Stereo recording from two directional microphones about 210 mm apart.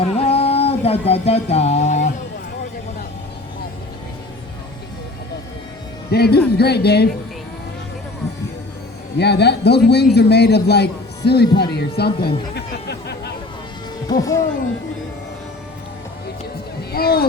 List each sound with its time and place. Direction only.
0.0 s music: 30° left (ahead or behind)
6.1 s speech: 50° left (ahead or behind)
9.1 s speech: 50° left (ahead or behind)
12.5 s a sound: 50° left (ahead or behind)
14.1 s speech: 15° left (ahead or behind)
16.9 s speech: 45° left (ahead or behind)